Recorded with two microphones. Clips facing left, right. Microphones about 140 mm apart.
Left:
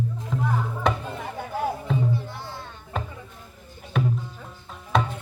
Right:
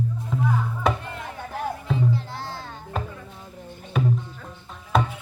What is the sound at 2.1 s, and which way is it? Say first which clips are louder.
Music: right 2 dB; 90° right.